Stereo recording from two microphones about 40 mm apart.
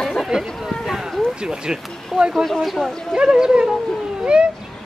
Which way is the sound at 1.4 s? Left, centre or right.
Centre.